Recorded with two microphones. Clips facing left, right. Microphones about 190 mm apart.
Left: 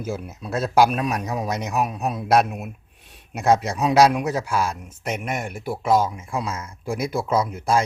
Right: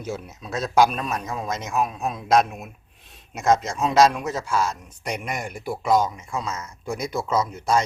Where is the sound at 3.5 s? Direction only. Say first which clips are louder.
Left 2 dB; 60° left (ahead or behind).